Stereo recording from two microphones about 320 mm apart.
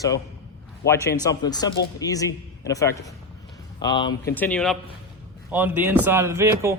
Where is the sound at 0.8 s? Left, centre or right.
Left.